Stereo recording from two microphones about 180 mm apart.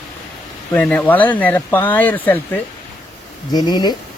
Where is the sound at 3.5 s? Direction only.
20° left (ahead or behind).